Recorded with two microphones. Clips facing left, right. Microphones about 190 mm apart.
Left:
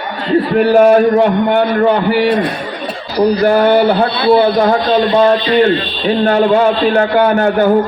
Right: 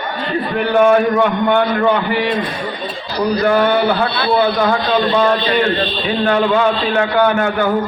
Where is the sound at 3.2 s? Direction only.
35° left (ahead or behind).